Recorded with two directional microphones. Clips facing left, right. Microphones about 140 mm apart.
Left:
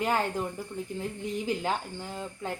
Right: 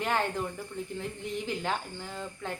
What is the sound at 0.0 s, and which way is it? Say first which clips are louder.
Speech: left 2 dB; 10° left (ahead or behind).